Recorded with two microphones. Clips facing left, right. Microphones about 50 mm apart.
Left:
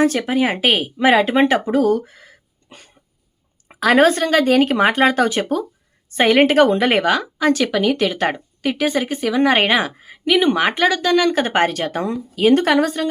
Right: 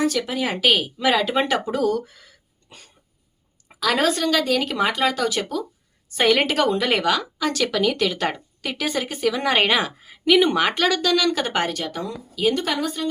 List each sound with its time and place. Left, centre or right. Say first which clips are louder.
0.0 s speech: left 6 dB; left
3.7 s speech: left 7 dB; left
10.2 s speech: left 1 dB; centre; by 11.6 s left
11.6 s a woman's voice: left 7 dB; left